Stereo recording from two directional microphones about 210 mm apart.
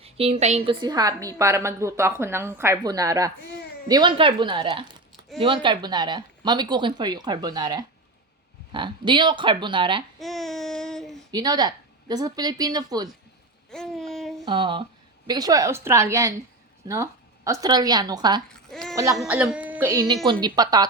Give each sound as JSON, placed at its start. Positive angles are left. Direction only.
{"t": 0.0, "sound": "a woman's voice", "side_deg": -30}
{"t": 10.2, "sound": "babbling", "side_deg": 0}
{"t": 11.3, "sound": "a woman's voice", "side_deg": -20}
{"t": 13.7, "sound": "a sound", "side_deg": 0}
{"t": 14.4, "sound": "a woman's voice", "side_deg": -25}
{"t": 18.7, "sound": "goat", "side_deg": 0}
{"t": 19.1, "sound": "a woman's voice", "side_deg": -5}
{"t": 19.9, "sound": "a woman's voice", "side_deg": -20}